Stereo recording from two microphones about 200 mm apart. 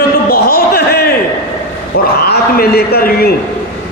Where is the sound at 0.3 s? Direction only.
50° left (ahead or behind).